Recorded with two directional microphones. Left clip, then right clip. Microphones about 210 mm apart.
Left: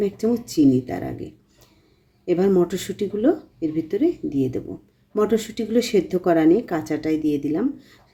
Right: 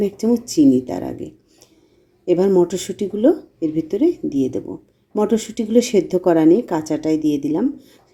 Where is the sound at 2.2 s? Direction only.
5° right (ahead or behind).